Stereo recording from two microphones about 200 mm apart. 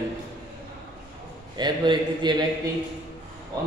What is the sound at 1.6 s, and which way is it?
Speech, 20° right (ahead or behind).